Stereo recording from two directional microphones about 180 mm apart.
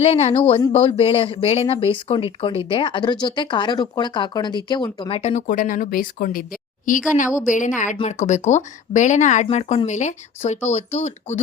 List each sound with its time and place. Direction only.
0.0 s a woman's voice: 35° left (ahead or behind)